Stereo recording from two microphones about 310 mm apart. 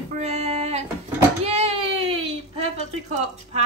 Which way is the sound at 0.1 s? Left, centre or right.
Right.